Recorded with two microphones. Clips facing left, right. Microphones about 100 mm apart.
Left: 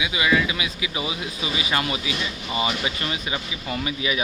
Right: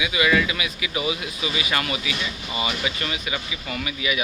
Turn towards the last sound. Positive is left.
turn(degrees=30)  # may be behind; listen again after turning